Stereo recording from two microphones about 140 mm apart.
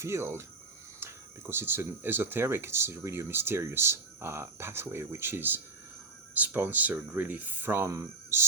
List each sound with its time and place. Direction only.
0.0 s speech: 20° right (ahead or behind)